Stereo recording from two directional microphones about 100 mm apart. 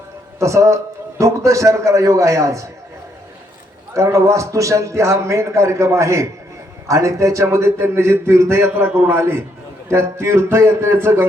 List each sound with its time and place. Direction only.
0.3 s a man's voice: 30° right (ahead or behind)
3.9 s a man's voice: 30° right (ahead or behind)